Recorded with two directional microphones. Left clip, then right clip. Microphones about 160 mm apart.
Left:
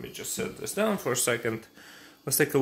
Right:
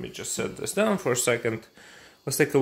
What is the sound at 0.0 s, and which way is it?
Speech, 60° right (ahead or behind).